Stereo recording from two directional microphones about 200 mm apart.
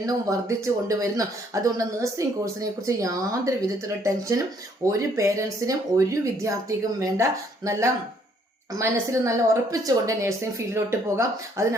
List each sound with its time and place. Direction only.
0.0 s speech: 15° right (ahead or behind)